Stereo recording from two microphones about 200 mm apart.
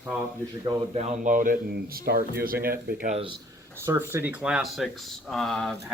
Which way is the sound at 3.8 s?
15° right (ahead or behind).